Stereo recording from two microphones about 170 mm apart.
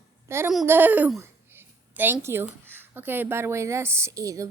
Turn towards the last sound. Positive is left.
turn(degrees=-20)  # may be behind; listen again after turning